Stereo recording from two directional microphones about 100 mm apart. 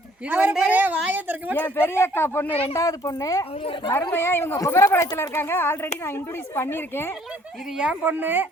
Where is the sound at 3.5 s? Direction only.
65° left (ahead or behind).